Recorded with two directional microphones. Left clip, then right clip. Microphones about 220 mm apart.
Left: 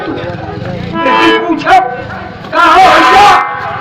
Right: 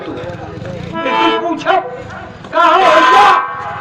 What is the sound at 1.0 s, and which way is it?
Speech, 25° right (ahead or behind).